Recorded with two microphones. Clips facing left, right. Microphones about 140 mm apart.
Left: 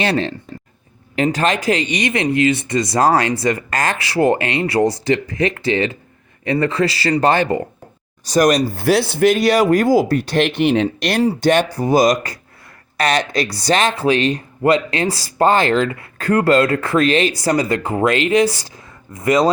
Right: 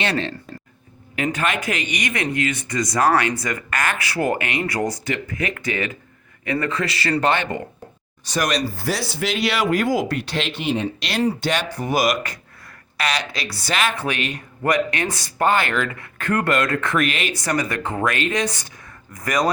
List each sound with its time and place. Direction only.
0.0 s speech: 35° left (ahead or behind)
10.6 s speech: 65° left (ahead or behind)
11.2 s speech: 35° left (ahead or behind)